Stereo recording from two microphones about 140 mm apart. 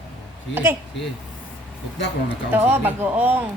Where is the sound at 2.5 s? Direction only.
15° right (ahead or behind).